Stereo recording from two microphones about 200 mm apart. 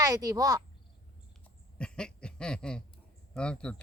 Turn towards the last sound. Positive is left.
turn(degrees=5)  # may be behind; listen again after turning